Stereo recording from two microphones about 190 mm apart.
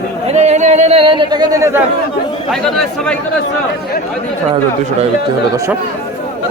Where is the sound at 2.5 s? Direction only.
5° left (ahead or behind).